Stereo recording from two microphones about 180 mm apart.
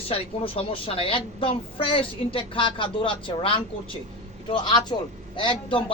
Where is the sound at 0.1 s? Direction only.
30° left (ahead or behind).